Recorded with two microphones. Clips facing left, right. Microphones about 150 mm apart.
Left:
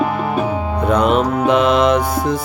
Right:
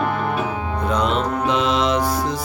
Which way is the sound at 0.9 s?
55° left (ahead or behind).